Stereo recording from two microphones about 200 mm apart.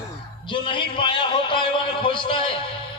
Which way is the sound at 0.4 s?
25° left (ahead or behind).